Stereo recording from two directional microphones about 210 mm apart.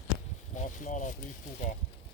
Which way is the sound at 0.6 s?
35° left (ahead or behind).